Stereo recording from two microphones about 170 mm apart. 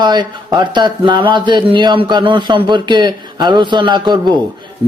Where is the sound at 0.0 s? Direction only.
25° right (ahead or behind).